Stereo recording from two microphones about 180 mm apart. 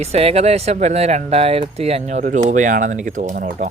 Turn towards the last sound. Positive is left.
turn(degrees=-45)  # may be behind; listen again after turning